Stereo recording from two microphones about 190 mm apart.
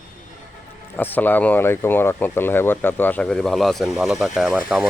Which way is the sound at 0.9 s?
10° left (ahead or behind).